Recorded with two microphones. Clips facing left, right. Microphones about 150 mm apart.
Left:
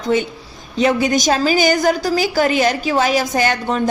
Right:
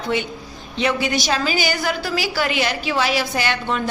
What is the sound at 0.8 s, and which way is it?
A woman's voice, 40° left (ahead or behind).